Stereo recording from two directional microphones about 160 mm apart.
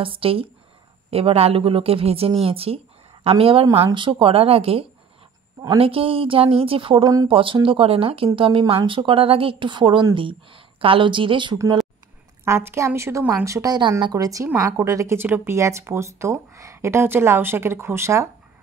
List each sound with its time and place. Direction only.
0.0 s a woman's voice: 35° right (ahead or behind)
3.6 s a woman's voice: 15° right (ahead or behind)
3.9 s a woman's voice: 30° right (ahead or behind)
11.5 s a woman's voice: 20° right (ahead or behind)